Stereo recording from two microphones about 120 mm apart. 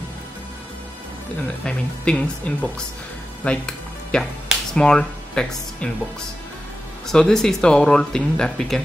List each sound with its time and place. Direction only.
1.6 s speech: 10° left (ahead or behind)
7.1 s speech: 5° left (ahead or behind)